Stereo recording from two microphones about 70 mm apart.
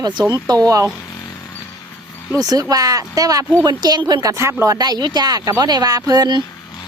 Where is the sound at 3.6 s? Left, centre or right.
Right.